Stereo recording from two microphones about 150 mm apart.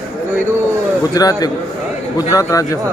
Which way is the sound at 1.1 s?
25° left (ahead or behind).